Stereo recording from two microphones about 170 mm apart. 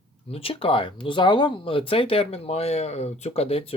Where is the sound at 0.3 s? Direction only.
35° left (ahead or behind).